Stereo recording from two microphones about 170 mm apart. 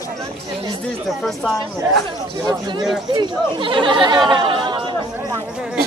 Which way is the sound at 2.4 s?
25° right (ahead or behind).